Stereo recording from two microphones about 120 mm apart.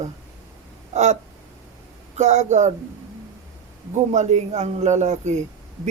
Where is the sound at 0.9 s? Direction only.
75° right (ahead or behind).